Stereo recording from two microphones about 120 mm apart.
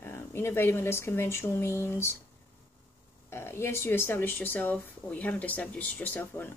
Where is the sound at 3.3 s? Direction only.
20° left (ahead or behind).